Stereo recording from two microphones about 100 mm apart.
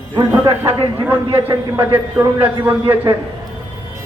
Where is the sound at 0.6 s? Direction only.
20° right (ahead or behind).